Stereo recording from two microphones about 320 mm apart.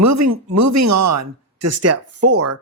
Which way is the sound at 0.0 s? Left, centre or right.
Right.